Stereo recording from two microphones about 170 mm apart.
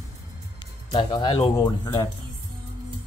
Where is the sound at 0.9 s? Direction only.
25° left (ahead or behind).